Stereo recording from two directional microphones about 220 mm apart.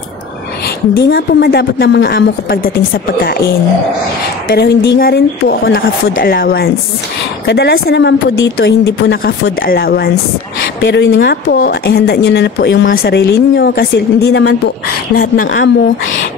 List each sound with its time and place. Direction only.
0.9 s a woman's voice: 45° left (ahead or behind)
4.5 s a woman's voice: 50° left (ahead or behind)
15.3 s speech: 40° left (ahead or behind)